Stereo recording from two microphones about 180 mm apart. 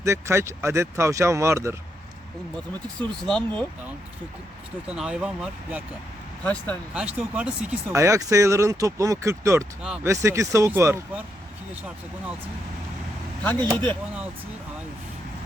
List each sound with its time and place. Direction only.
0.0 s speech: 15° right (ahead or behind)
3.0 s speech: 5° left (ahead or behind)
4.9 s speech: 5° right (ahead or behind)
6.4 s speech: 10° left (ahead or behind)
6.9 s speech: 5° right (ahead or behind)
9.8 s speech: 5° right (ahead or behind)
10.1 s speech: 15° right (ahead or behind)
13.4 s speech: 10° left (ahead or behind)